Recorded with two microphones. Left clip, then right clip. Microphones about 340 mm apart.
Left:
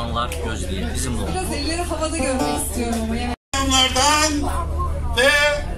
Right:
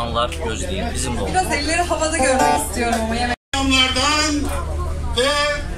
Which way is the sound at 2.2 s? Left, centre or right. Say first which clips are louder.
Right 9 dB; right.